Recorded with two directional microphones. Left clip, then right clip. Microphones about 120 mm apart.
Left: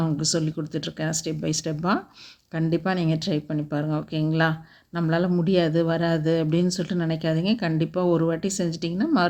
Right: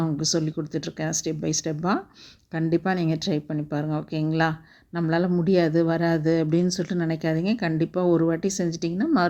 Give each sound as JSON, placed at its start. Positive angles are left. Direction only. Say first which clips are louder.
{"t": 0.0, "sound": "speech", "louder": "even", "side_deg": -40}